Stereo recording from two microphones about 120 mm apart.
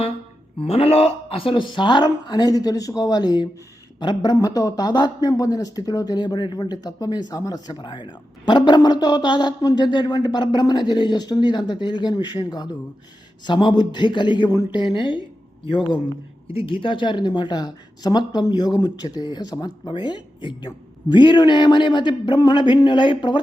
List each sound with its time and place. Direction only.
0.6 s speech: 55° left (ahead or behind)
16.5 s speech: 50° left (ahead or behind)